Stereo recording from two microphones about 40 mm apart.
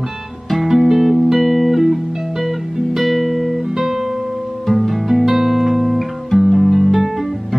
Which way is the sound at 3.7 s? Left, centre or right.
Centre.